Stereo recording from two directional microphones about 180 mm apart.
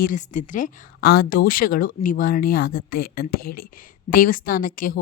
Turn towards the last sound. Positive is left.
turn(degrees=50)  # may be behind; listen again after turning